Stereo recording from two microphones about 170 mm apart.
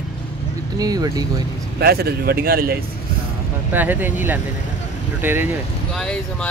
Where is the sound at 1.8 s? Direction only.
65° right (ahead or behind).